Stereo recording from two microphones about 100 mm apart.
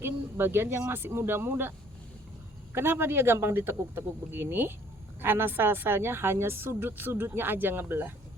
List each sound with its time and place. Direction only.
0.0 s a sound: 25° right (ahead or behind)
0.9 s a woman's voice: 25° right (ahead or behind)
2.7 s a woman's voice: 20° right (ahead or behind)